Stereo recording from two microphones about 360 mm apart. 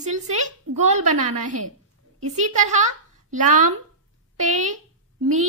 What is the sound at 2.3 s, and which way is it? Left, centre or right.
Speech, centre.